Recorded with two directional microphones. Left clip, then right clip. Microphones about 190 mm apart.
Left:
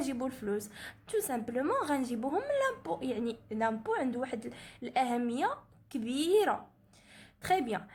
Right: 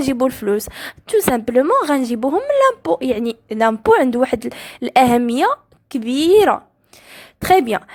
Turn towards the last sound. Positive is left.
turn(degrees=-50)  # may be behind; listen again after turning